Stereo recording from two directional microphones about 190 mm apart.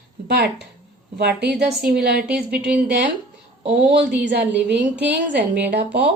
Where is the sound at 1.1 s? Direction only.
60° right (ahead or behind).